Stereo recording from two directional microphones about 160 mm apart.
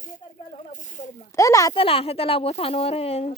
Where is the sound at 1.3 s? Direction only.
20° left (ahead or behind).